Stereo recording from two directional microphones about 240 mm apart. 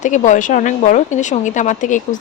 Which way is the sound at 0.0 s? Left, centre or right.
Left.